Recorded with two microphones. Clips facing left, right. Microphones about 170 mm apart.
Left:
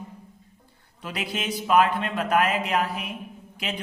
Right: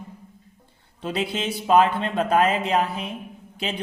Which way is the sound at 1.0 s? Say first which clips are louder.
Right 5 dB; 25° right (ahead or behind).